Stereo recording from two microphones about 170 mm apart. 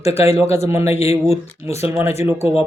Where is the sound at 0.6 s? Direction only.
20° right (ahead or behind).